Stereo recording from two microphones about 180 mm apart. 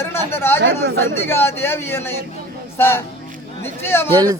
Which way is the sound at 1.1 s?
15° left (ahead or behind).